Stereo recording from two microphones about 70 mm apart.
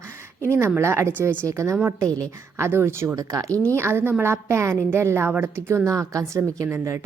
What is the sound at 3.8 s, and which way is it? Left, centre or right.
A woman's voice, right.